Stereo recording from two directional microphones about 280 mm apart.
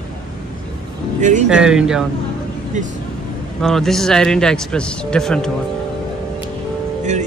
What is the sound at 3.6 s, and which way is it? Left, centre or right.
Speech, centre.